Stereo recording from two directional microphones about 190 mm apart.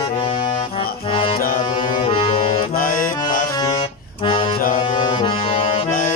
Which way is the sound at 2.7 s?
45° left (ahead or behind).